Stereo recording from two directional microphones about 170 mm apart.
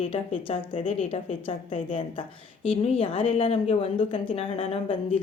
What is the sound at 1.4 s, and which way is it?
A woman's voice, 30° left (ahead or behind).